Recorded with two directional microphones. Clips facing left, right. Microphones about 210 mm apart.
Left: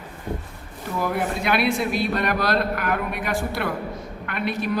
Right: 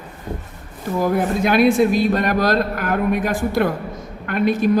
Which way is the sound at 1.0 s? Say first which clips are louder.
Right 6 dB; 40° right (ahead or behind).